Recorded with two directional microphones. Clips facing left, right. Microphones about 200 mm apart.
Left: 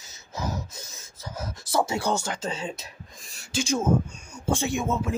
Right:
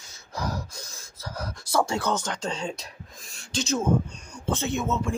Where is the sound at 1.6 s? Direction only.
25° left (ahead or behind).